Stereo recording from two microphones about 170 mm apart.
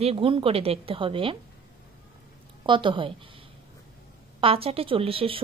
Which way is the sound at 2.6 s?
30° right (ahead or behind).